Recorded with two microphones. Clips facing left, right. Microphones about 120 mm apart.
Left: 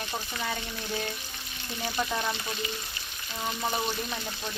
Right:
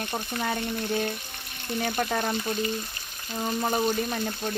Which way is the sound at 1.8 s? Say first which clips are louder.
Right 4 dB; 55° right (ahead or behind).